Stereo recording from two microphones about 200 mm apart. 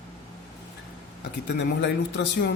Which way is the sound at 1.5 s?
60° left (ahead or behind).